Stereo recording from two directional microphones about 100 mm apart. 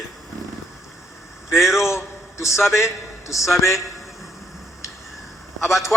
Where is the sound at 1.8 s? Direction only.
30° left (ahead or behind).